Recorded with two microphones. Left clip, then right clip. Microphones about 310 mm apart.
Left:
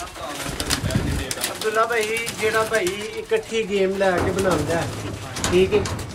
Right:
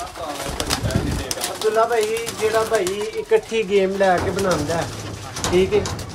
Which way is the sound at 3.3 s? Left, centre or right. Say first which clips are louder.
Right 4 dB; centre.